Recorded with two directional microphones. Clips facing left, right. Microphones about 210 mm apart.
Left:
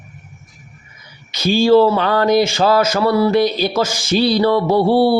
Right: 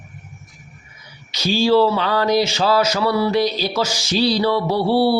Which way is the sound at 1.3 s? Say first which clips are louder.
Left 4 dB; 55° left (ahead or behind).